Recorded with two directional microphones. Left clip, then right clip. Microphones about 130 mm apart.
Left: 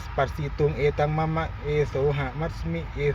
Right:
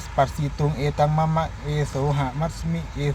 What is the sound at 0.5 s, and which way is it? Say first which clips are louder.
Speech: left 2 dB; 20° right (ahead or behind).